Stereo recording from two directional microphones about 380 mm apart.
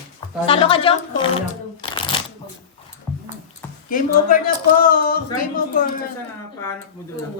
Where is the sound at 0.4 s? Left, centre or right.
Centre.